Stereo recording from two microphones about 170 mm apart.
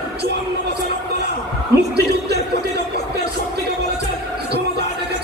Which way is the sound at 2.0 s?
75° right (ahead or behind).